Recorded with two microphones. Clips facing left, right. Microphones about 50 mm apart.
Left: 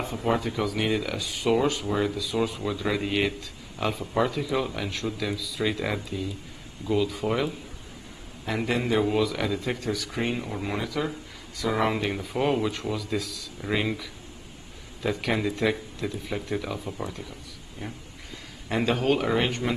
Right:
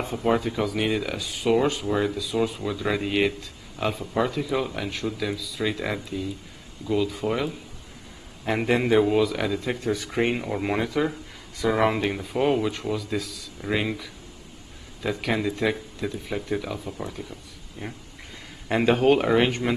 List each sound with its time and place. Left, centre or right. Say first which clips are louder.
0.0 s speech: right 3 dB; centre
8.5 s speech: right 4 dB; right
9.0 s speech: right 3 dB; centre
9.9 s speech: right 4 dB; right
10.4 s speech: right 5 dB; centre
18.9 s speech: right 5 dB; centre